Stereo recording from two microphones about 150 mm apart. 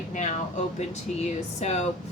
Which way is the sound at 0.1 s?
50° left (ahead or behind).